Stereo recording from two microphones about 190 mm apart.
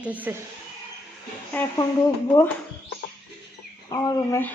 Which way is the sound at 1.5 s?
15° left (ahead or behind).